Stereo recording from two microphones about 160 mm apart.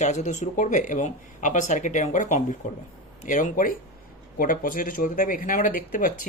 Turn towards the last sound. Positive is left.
turn(degrees=60)  # may be behind; listen again after turning